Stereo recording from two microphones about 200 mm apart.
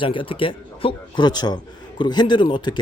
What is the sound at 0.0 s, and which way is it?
A man's voice, 25° left (ahead or behind).